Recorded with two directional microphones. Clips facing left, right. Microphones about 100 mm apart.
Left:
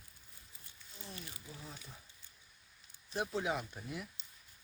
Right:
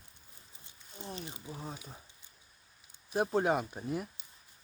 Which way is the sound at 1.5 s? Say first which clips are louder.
Right 8 dB; 40° right (ahead or behind).